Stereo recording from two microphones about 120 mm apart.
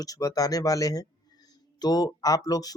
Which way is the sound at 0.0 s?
30° left (ahead or behind).